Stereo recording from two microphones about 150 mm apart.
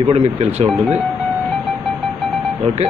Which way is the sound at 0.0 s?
45° right (ahead or behind).